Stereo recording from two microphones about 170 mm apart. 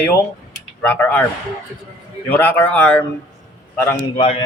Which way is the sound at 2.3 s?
10° left (ahead or behind).